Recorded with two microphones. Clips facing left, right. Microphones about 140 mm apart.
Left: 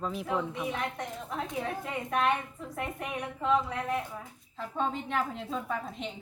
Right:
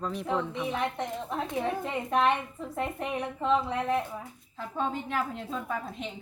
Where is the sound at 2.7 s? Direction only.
30° right (ahead or behind).